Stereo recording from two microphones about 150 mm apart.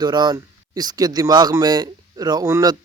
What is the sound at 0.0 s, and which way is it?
Speech, 30° right (ahead or behind).